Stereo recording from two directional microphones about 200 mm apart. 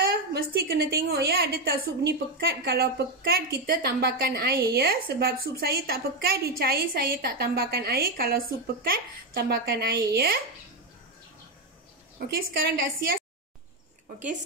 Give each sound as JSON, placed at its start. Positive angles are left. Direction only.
{"t": 0.1, "sound": "a woman's voice", "side_deg": -50}
{"t": 12.3, "sound": "a woman's voice", "side_deg": -45}